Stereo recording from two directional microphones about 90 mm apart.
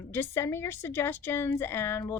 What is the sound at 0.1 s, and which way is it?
A woman's voice, 25° left (ahead or behind).